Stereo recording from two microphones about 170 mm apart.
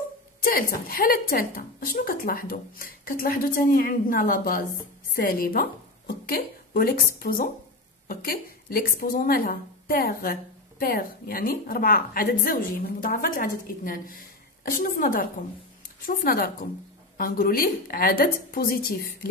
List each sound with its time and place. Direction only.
0.4 s a woman's voice: 60° left (ahead or behind)